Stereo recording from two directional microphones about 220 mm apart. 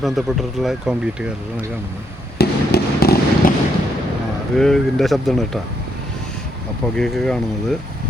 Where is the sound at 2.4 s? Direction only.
45° left (ahead or behind).